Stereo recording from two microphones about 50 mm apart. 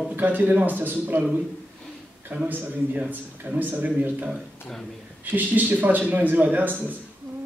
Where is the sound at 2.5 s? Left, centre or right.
Right.